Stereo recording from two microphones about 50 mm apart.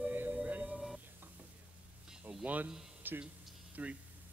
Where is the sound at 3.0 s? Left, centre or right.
Right.